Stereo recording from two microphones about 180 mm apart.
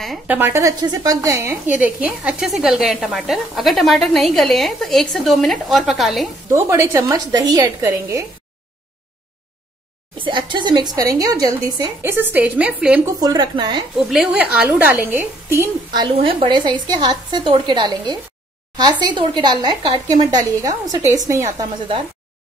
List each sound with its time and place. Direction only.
0.0 s a woman's voice: centre (ahead or behind)
0.4 s a woman's voice: 15° right (ahead or behind)
6.5 s a woman's voice: 15° right (ahead or behind)
10.1 s speech: 30° right (ahead or behind); by 13.1 s 5° right (ahead or behind)
13.2 s speech: 25° right (ahead or behind)
14.4 s a woman's voice: 5° right (ahead or behind)
15.9 s a woman's voice: 25° right (ahead or behind)